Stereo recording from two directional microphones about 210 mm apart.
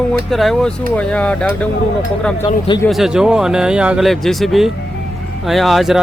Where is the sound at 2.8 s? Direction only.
Centre (ahead or behind).